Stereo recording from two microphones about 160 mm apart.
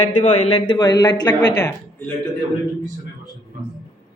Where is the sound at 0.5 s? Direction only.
30° left (ahead or behind).